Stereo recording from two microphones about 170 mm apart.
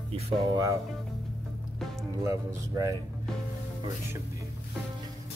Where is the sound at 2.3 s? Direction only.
20° right (ahead or behind).